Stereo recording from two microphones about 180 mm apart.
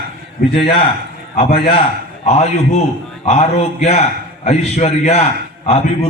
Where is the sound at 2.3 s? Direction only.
35° left (ahead or behind).